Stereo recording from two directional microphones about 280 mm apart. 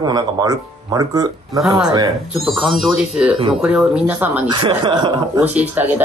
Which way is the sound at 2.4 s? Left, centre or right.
Centre.